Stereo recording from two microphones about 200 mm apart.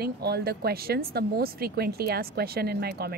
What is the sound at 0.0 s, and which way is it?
Speech, 50° right (ahead or behind).